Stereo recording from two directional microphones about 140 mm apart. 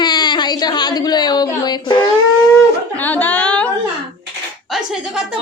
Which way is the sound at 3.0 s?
15° left (ahead or behind).